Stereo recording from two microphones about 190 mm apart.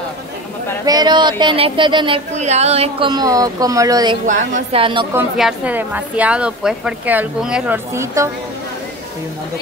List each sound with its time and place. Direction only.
0.8 s speech: 20° right (ahead or behind)
4.3 s a woman's voice: 40° right (ahead or behind)
5.4 s a woman's voice: 5° right (ahead or behind)